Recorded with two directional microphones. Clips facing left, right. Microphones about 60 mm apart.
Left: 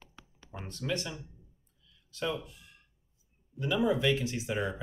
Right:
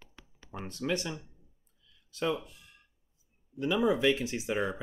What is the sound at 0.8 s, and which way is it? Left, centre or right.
Speech, centre.